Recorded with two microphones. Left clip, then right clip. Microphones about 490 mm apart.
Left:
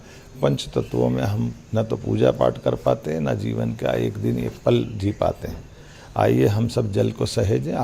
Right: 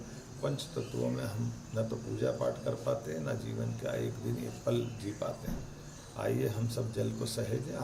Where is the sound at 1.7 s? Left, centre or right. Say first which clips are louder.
Left 13 dB; left.